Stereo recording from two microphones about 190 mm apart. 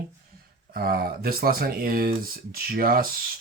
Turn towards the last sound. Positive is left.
turn(degrees=-50)  # may be behind; listen again after turning